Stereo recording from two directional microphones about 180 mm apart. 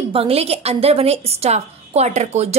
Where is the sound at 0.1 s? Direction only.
35° right (ahead or behind).